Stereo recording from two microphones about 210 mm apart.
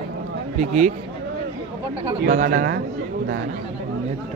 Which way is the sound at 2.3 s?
40° right (ahead or behind).